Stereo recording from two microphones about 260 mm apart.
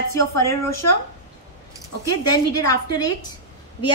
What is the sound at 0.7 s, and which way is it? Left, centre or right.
Speech, left.